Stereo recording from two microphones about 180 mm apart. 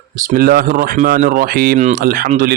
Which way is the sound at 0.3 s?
60° right (ahead or behind).